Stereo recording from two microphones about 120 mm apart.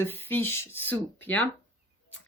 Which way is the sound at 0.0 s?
15° left (ahead or behind).